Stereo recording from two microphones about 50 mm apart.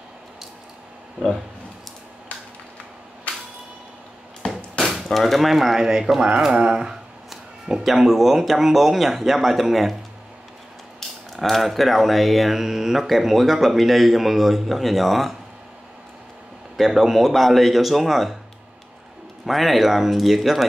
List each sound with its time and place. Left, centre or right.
4.4 s a sound: centre
4.7 s speech: centre
11.4 s speech: centre
16.7 s speech: centre
19.4 s speech: centre